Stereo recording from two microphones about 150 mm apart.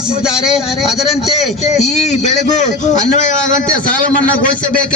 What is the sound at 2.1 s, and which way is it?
A man's voice, 50° left (ahead or behind).